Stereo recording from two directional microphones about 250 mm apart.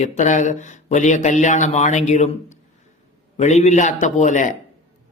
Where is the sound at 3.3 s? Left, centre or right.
Left.